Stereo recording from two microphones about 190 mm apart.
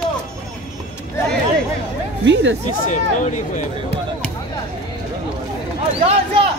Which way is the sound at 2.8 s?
40° left (ahead or behind).